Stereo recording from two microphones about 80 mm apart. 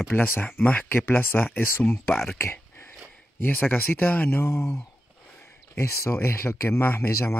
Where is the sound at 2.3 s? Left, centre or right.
Left.